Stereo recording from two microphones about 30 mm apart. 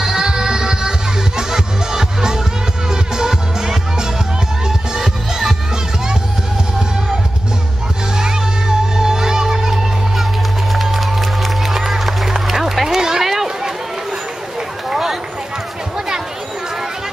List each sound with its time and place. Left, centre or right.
0.0 s music: right
8.2 s music: right
10.7 s music: centre
13.2 s run: centre
14.9 s run: centre